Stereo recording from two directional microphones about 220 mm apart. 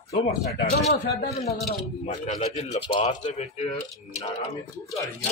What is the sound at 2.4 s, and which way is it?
Speech, 30° left (ahead or behind).